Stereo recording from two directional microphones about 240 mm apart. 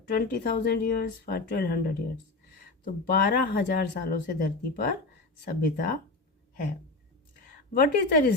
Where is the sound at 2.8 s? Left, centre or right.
Left.